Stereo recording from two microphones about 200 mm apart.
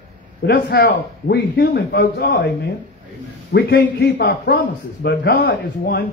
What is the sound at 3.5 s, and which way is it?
A man's voice, 50° left (ahead or behind).